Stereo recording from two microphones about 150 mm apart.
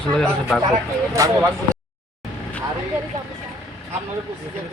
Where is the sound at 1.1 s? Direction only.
20° right (ahead or behind).